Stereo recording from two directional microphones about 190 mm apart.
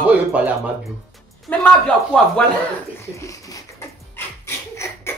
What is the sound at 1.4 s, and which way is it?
Speech, 5° left (ahead or behind).